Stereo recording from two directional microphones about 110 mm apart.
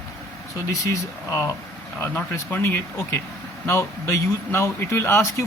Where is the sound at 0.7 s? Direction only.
30° left (ahead or behind).